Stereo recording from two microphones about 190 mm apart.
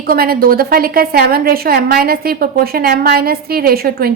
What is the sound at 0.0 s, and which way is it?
A woman's voice, 50° right (ahead or behind).